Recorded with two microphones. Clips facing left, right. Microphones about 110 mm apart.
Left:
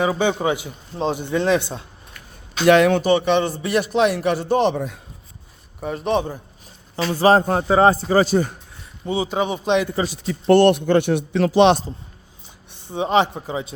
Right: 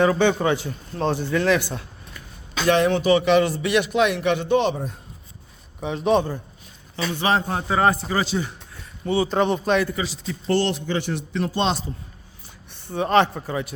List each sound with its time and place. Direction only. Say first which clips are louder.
0.0 s speech: right 1 dB; 10° left (ahead or behind)
2.6 s speech: left 5 dB; 80° left
3.0 s speech: even; 35° left (ahead or behind)
4.7 s speech: left 3 dB; 70° left (ahead or behind)
5.8 s speech: right 1 dB; centre (ahead or behind)
6.9 s speech: left 7 dB; 40° left (ahead or behind)
7.7 s speech: left 5 dB; 30° left (ahead or behind); by 8.5 s 45° left (ahead or behind)
9.0 s speech: right 2 dB; 15° left (ahead or behind)
10.1 s a man's voice: left 8 dB; 55° left (ahead or behind); by 11.8 s 80° left
12.7 s speech: even; 15° left (ahead or behind)